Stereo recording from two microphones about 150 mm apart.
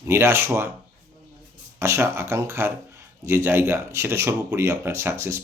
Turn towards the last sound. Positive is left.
turn(degrees=-15)  # may be behind; listen again after turning